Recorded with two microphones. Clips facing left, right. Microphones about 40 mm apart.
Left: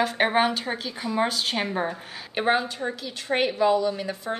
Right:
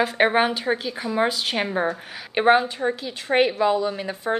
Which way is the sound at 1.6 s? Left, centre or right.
Centre.